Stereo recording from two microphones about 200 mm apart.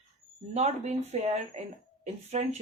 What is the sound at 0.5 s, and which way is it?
Speech, 35° right (ahead or behind).